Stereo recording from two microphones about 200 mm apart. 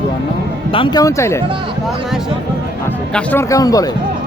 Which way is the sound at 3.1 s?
10° left (ahead or behind).